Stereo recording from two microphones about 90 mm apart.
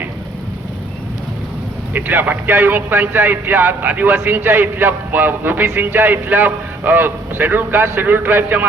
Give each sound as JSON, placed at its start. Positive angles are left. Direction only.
{"t": 1.9, "sound": "speech", "side_deg": -20}